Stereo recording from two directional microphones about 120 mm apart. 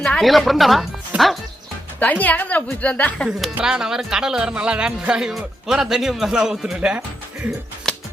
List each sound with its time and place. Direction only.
0.0 s speech: 5° left (ahead or behind)
1.1 s speech: 10° right (ahead or behind)
2.0 s a woman's voice: 15° left (ahead or behind)
3.5 s speech: 5° right (ahead or behind)
7.9 s music: 5° left (ahead or behind)